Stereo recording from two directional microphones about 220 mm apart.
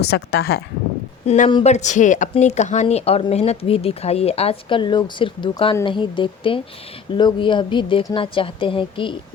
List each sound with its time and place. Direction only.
0.0 s speech: 50° left (ahead or behind)
1.3 s speech: 25° left (ahead or behind)